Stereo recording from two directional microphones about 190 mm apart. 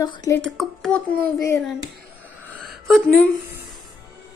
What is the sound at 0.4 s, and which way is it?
Child singing, 5° left (ahead or behind).